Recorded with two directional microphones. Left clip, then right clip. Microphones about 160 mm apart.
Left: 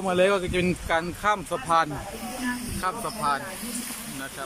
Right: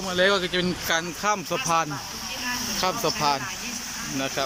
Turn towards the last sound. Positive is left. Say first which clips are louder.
# right 3 dB
turn(degrees=-20)  # may be behind; listen again after turning